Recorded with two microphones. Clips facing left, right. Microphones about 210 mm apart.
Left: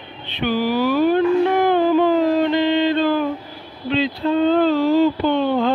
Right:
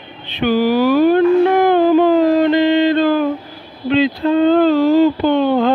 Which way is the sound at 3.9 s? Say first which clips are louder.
Right 5 dB; 60° right (ahead or behind).